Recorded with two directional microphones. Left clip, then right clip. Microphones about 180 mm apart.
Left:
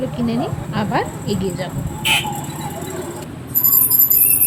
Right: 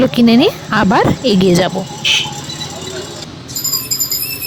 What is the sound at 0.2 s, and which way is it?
Speech, 70° right (ahead or behind).